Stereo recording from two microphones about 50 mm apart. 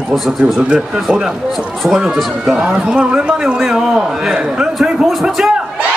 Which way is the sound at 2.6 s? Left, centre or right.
Centre.